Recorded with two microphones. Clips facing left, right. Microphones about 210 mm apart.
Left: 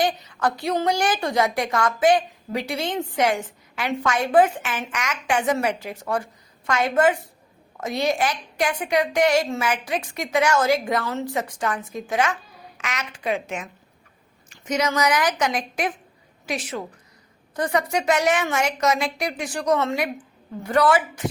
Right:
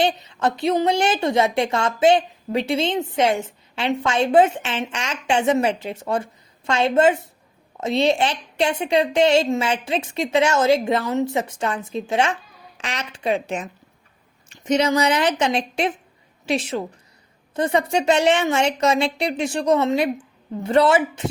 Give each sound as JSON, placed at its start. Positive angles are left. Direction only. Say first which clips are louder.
{"t": 0.0, "sound": "a woman's voice", "louder": "right 2 dB", "side_deg": -25}